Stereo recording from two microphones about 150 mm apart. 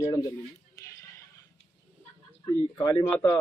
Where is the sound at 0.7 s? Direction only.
20° left (ahead or behind).